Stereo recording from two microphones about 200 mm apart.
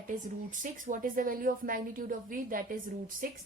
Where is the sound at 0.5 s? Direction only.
40° right (ahead or behind).